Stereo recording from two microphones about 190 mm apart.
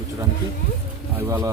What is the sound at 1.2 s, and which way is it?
Speech, 15° right (ahead or behind).